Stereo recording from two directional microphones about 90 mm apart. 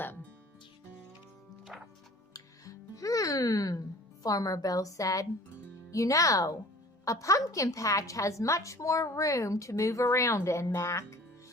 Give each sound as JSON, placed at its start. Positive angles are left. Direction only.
{"t": 0.0, "sound": "music", "side_deg": 20}
{"t": 1.7, "sound": "music", "side_deg": -10}
{"t": 2.3, "sound": "music", "side_deg": 40}
{"t": 5.9, "sound": "a woman's voice", "side_deg": 35}